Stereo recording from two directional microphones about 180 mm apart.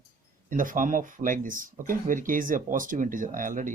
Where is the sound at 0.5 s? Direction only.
45° right (ahead or behind).